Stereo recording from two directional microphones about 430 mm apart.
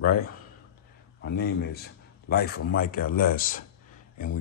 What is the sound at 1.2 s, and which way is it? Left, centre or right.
A man's voice, left.